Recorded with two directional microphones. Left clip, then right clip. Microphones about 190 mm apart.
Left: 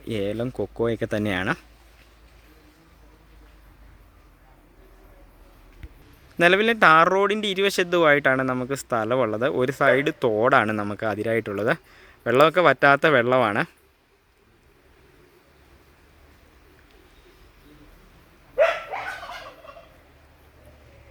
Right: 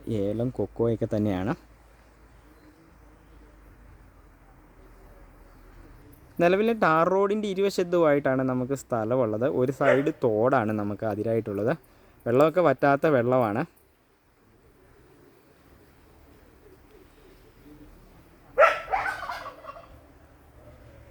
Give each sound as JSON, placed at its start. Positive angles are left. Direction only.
{"t": 0.1, "sound": "speech", "side_deg": -10}
{"t": 0.3, "sound": "speech", "side_deg": 15}
{"t": 0.9, "sound": "speech", "side_deg": -10}
{"t": 6.3, "sound": "a man's voice", "side_deg": 0}